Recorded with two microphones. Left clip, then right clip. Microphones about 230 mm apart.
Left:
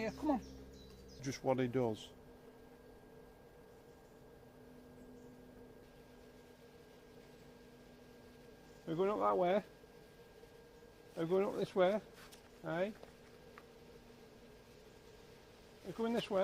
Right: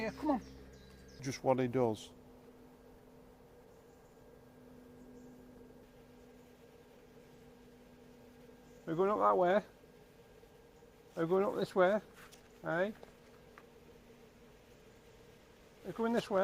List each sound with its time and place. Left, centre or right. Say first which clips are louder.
0.0 s speech: right 2 dB; right
1.2 s speech: right 4 dB; right
8.9 s speech: right 4 dB; right
11.2 s speech: right 3 dB; right
16.0 s speech: right 3 dB; right